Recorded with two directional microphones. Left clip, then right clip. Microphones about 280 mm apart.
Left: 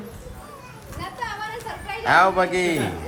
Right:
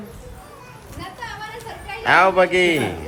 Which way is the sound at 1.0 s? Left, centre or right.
Centre.